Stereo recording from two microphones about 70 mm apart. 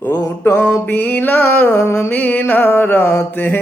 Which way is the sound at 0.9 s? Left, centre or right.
Left.